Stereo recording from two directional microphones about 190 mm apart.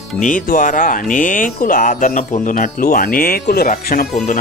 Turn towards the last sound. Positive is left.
turn(degrees=45)  # may be behind; listen again after turning